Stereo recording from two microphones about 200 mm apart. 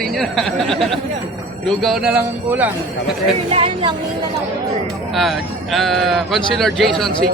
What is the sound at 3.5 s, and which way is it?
Speech, 25° right (ahead or behind).